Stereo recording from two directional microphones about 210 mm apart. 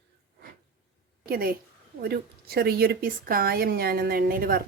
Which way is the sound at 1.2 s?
45° right (ahead or behind).